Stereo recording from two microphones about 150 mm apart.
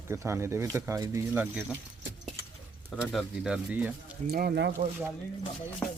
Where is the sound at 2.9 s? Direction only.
Centre (ahead or behind).